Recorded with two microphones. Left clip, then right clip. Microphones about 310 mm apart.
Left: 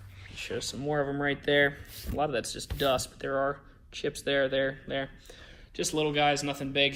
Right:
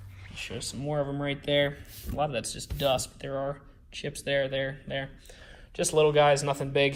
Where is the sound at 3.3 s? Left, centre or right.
Right.